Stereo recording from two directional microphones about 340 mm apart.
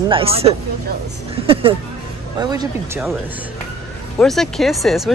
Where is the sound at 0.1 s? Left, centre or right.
Centre.